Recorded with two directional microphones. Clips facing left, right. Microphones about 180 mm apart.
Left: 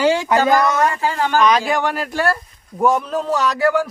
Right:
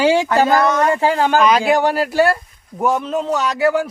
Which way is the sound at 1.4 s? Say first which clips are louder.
Right 3 dB; 10° right (ahead or behind).